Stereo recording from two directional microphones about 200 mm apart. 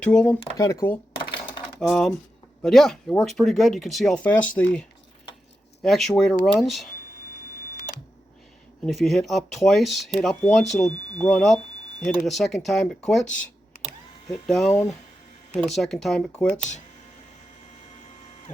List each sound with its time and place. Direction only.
0.0 s speech: 5° left (ahead or behind)
0.5 s speech: 15° left (ahead or behind)
1.8 s speech: 5° left (ahead or behind)
8.9 s speech: centre (ahead or behind)
14.7 s speech: 10° left (ahead or behind)
15.5 s speech: centre (ahead or behind)
16.5 s speech: 35° left (ahead or behind)